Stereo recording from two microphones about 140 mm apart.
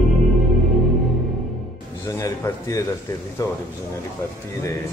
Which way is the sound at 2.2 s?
20° left (ahead or behind).